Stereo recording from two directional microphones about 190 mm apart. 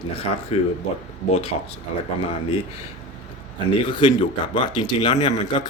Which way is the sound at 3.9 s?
25° left (ahead or behind).